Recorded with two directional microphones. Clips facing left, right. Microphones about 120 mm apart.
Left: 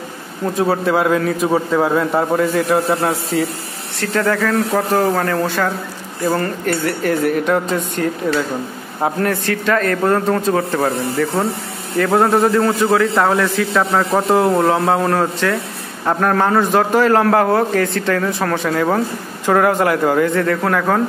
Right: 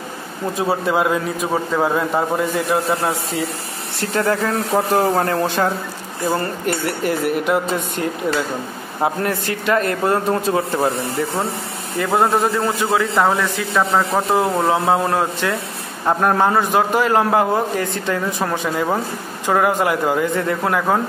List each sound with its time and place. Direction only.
0.6 s a man's voice: centre (ahead or behind)
4.1 s a man's voice: 25° right (ahead or behind)
9.3 s a man's voice: 15° right (ahead or behind)
12.0 s a man's voice: 5° right (ahead or behind)
20.3 s a man's voice: 15° right (ahead or behind)